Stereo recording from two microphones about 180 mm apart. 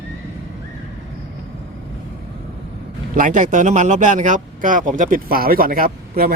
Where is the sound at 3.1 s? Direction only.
50° right (ahead or behind).